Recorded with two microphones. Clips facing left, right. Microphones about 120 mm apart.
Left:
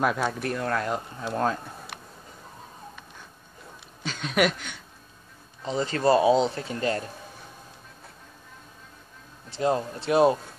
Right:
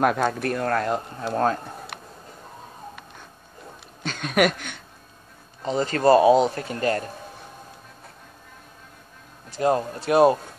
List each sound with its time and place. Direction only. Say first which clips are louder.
0.0 s speech: right 4 dB; 50° right (ahead or behind)
4.0 s speech: right 3 dB; 55° right (ahead or behind)
9.6 s speech: right 3 dB; 45° right (ahead or behind)